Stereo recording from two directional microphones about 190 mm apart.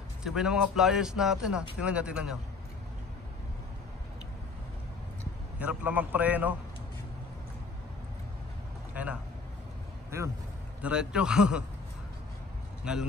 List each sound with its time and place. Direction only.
0.2 s a man's voice: 5° right (ahead or behind)
5.6 s a man's voice: 5° right (ahead or behind)
8.9 s a man's voice: 5° right (ahead or behind)
10.8 s a man's voice: 5° right (ahead or behind)
12.9 s a man's voice: 5° right (ahead or behind)